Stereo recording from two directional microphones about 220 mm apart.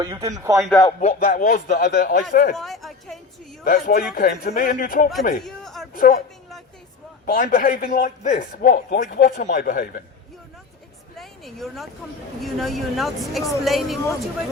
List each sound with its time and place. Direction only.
0.0 s speech: 15° right (ahead or behind)
0.6 s speech: 5° left (ahead or behind)
0.9 s a man's voice: 35° left (ahead or behind)
2.6 s a sound: centre (ahead or behind)
3.6 s a man's voice: 40° left (ahead or behind)
5.5 s a sound: centre (ahead or behind)
6.0 s a man's voice: 40° left (ahead or behind)
7.3 s a man's voice: 40° left (ahead or behind)
11.2 s a sound: centre (ahead or behind)
12.4 s speech: centre (ahead or behind)